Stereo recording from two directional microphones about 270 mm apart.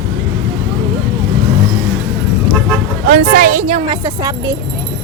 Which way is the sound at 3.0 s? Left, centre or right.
Right.